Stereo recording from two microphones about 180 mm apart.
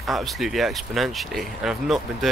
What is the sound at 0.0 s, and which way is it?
Speech, centre (ahead or behind).